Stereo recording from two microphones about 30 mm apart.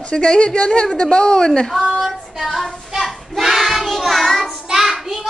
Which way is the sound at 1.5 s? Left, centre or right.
Centre.